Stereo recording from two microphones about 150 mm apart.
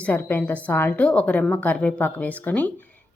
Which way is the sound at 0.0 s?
15° left (ahead or behind).